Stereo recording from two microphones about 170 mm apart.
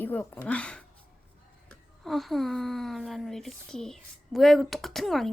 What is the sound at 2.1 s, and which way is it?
Speech, centre (ahead or behind).